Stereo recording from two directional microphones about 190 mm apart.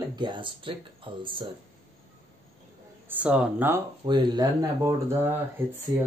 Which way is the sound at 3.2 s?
5° right (ahead or behind).